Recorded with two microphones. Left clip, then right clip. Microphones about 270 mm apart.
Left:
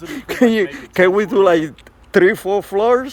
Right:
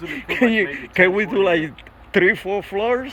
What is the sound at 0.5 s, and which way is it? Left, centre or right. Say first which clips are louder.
A man's voice: left 1 dB; left.